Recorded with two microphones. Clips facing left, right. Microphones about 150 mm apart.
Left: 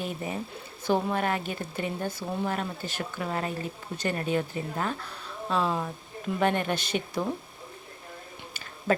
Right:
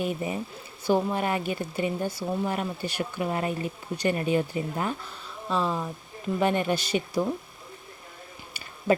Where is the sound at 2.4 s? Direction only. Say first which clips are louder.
Left 1 dB; 10° right (ahead or behind).